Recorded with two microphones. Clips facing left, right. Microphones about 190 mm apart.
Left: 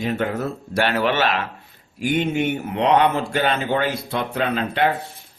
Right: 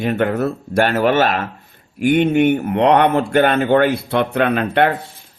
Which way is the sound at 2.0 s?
60° right (ahead or behind).